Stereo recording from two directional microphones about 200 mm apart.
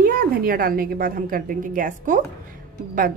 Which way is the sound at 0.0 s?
50° right (ahead or behind).